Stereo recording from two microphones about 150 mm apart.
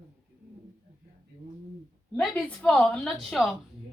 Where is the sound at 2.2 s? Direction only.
5° left (ahead or behind).